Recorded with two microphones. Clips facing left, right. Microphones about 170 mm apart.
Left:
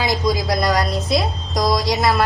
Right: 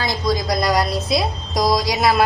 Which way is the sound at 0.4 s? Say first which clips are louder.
Even; centre (ahead or behind).